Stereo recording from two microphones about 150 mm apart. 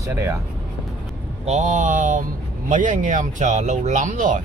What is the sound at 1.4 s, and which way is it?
Speech, 50° right (ahead or behind).